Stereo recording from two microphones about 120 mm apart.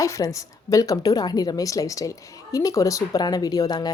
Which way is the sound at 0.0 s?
25° left (ahead or behind).